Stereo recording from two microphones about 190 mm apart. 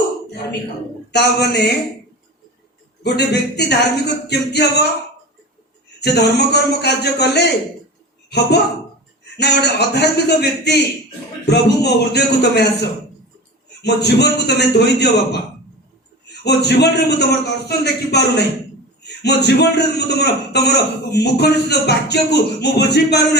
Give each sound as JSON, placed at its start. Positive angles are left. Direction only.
{"t": 1.1, "sound": "a man's voice", "side_deg": 60}
{"t": 3.0, "sound": "a man's voice", "side_deg": 60}
{"t": 6.0, "sound": "a man's voice", "side_deg": 60}
{"t": 13.8, "sound": "a man's voice", "side_deg": 60}
{"t": 16.4, "sound": "a man's voice", "side_deg": 60}